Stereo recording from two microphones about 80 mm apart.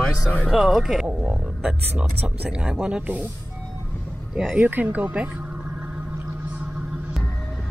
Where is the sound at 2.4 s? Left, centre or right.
Centre.